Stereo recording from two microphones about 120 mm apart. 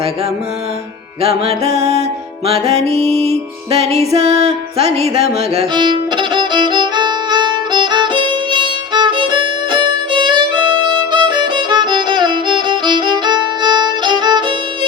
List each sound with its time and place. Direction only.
1.2 s music: 60° right (ahead or behind)
5.7 s violin: 40° right (ahead or behind)